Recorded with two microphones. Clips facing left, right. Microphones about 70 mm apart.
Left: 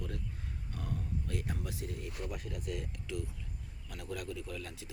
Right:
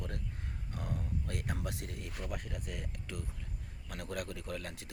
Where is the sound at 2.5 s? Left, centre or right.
Right.